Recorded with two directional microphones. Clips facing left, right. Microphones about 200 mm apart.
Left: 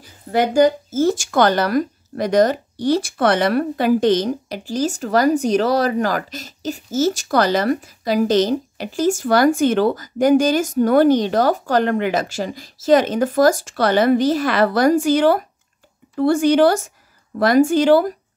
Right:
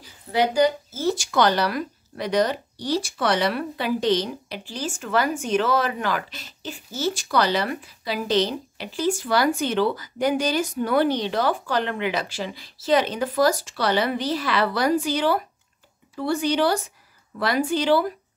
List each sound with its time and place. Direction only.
0.0 s speech: 50° left (ahead or behind)